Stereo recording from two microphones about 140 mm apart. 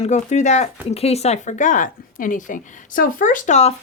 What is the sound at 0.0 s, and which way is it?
Speech, 60° left (ahead or behind).